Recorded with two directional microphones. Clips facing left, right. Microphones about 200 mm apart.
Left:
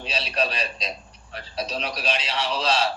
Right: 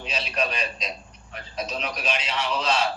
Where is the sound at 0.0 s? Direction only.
35° left (ahead or behind).